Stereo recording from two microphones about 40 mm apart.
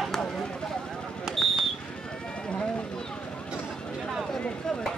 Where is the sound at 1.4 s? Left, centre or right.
Centre.